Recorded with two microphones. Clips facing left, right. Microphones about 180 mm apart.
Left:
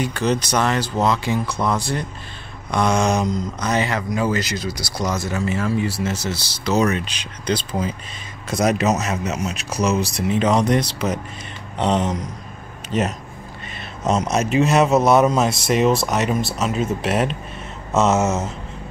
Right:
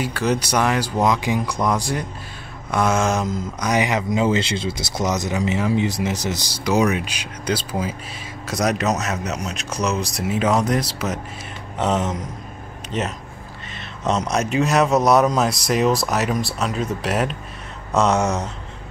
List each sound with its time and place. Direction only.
0.0 s speech: 5° right (ahead or behind)